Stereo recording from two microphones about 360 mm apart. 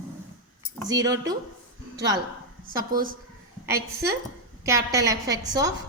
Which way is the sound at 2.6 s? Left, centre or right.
Right.